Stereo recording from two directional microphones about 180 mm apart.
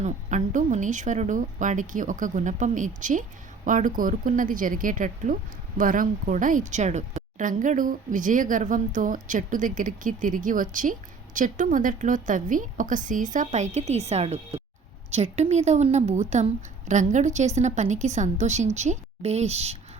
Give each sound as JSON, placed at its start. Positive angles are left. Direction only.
{"t": 0.0, "sound": "a woman's voice", "side_deg": -40}